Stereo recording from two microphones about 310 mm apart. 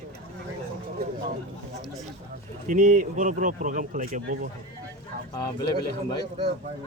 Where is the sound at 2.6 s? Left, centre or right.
Right.